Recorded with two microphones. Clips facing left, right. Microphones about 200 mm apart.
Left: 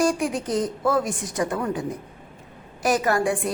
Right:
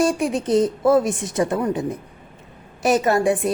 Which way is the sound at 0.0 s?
25° right (ahead or behind).